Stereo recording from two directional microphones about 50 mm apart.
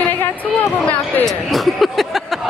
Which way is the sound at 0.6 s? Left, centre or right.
Left.